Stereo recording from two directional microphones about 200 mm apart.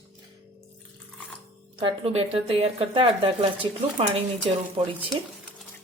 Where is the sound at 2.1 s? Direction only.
30° right (ahead or behind).